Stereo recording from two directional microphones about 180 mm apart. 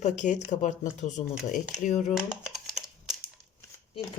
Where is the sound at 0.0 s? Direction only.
45° left (ahead or behind).